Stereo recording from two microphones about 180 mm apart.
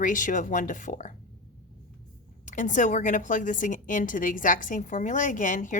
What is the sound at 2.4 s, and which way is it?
A woman's voice, 45° left (ahead or behind).